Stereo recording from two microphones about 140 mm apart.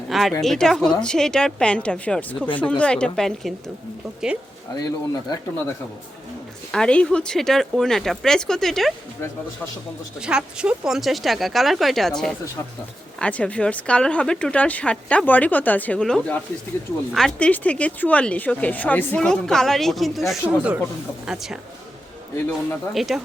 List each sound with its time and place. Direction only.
0.1 s a sound: centre (ahead or behind)
0.4 s speech: centre (ahead or behind)
4.8 s speech: 25° left (ahead or behind)
6.7 s speech: 5° left (ahead or behind)
10.2 s speech: 5° right (ahead or behind)
23.0 s speech: centre (ahead or behind)